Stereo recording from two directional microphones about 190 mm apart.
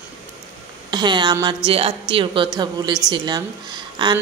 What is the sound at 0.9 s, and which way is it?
Speech, 25° right (ahead or behind).